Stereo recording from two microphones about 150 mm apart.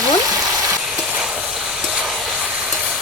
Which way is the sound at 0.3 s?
25° right (ahead or behind).